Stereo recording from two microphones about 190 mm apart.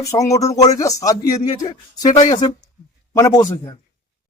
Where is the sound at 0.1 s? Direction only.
15° left (ahead or behind).